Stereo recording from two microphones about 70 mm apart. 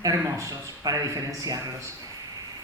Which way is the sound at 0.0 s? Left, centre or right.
Right.